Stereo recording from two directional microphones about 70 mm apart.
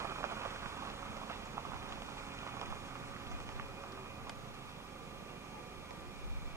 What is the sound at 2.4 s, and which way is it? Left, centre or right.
Vehicle, right.